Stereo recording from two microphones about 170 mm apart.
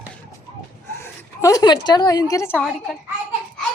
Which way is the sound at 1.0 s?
20° left (ahead or behind).